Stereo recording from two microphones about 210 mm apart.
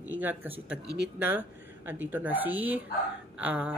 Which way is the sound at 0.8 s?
55° right (ahead or behind).